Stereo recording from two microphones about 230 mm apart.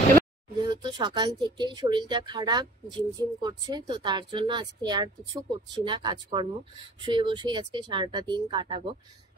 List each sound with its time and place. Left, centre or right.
0.7 s speech: centre